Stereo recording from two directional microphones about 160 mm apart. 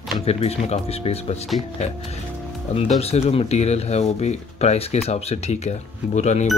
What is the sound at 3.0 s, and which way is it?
A man's voice, 40° left (ahead or behind).